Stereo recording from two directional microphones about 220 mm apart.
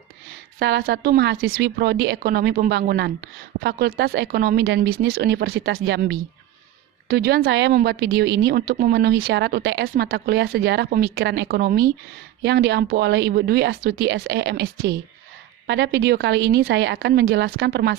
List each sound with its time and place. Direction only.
0.6 s speech: 50° right (ahead or behind)